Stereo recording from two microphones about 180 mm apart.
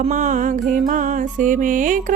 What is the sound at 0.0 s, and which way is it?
Music, 40° right (ahead or behind).